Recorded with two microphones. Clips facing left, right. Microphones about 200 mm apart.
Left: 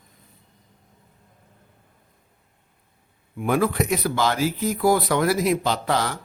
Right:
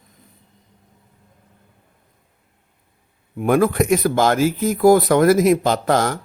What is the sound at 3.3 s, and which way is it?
Speech, 50° right (ahead or behind).